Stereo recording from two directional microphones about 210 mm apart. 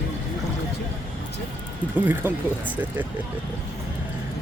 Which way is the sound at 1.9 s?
10° right (ahead or behind).